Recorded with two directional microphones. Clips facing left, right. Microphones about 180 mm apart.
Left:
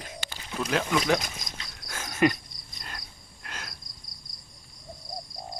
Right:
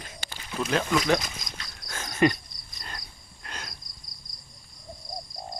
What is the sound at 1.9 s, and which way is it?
Cricket, 10° left (ahead or behind).